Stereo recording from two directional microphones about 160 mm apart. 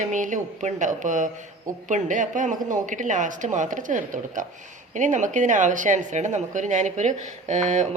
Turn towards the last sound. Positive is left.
turn(degrees=-50)  # may be behind; listen again after turning